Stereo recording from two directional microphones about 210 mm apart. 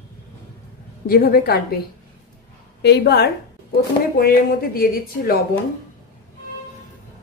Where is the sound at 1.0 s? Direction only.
45° left (ahead or behind).